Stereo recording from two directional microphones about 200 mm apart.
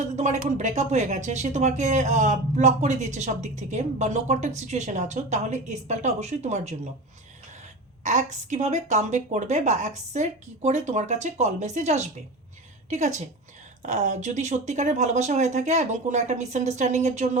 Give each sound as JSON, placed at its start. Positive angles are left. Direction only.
{"t": 0.2, "sound": "speech", "side_deg": -35}
{"t": 8.0, "sound": "speech", "side_deg": -35}